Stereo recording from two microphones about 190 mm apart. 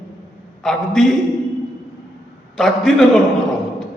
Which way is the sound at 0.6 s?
Centre (ahead or behind).